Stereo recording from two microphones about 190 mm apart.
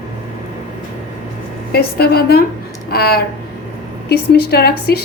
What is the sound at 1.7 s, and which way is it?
A woman's voice, 55° left (ahead or behind).